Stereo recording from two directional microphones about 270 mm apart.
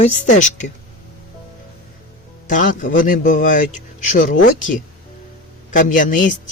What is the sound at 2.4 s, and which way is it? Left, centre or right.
A woman's voice, left.